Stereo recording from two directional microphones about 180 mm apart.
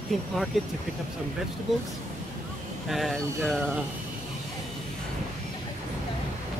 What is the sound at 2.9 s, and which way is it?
Speech, centre (ahead or behind).